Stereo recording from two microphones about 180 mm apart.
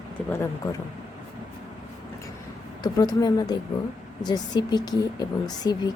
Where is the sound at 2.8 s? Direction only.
20° left (ahead or behind).